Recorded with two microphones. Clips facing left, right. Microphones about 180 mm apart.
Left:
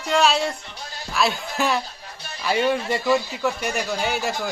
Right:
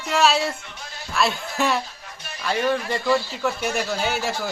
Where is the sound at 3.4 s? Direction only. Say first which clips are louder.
Even; 10° left (ahead or behind).